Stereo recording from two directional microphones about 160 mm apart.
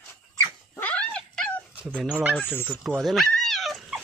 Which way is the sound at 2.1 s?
10° right (ahead or behind).